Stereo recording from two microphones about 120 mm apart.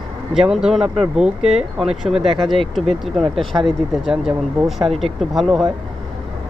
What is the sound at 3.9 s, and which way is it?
Speech, 5° right (ahead or behind).